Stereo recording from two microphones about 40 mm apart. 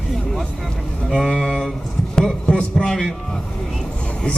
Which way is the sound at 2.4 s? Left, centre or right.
Left.